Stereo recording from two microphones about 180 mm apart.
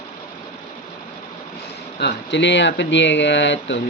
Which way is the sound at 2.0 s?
75° left (ahead or behind).